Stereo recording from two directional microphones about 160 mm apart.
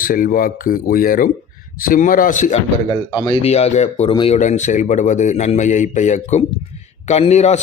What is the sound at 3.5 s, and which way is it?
Speech, 40° left (ahead or behind).